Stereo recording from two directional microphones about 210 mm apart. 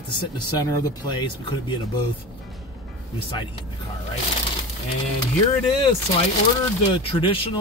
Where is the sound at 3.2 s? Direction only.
25° left (ahead or behind).